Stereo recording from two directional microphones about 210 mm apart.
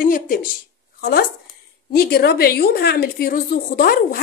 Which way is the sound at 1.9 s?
50° left (ahead or behind).